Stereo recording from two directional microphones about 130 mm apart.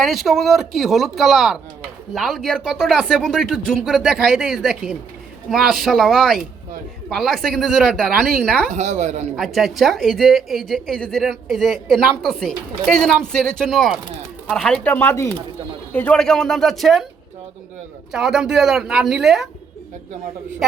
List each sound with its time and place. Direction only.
0.0 s speech: centre (ahead or behind)
8.7 s a woman's voice: 65° right (ahead or behind)
9.3 s speech: centre (ahead or behind)
18.1 s speech: 5° right (ahead or behind)